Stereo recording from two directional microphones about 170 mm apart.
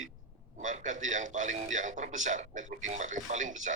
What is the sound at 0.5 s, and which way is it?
A man's voice, 50° right (ahead or behind).